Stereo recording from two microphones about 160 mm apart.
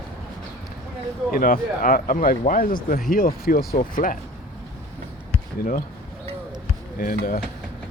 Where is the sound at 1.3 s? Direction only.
65° left (ahead or behind).